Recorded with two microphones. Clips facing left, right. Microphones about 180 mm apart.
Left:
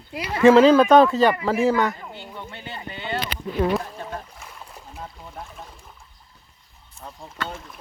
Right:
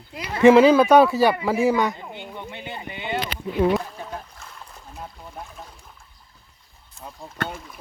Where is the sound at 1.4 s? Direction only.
10° right (ahead or behind).